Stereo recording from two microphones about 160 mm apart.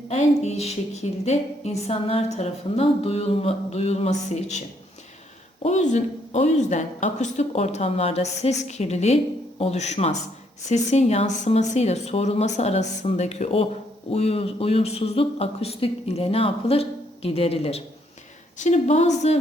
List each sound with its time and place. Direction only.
0.1 s a woman's voice: 40° left (ahead or behind)
5.6 s a woman's voice: 50° left (ahead or behind)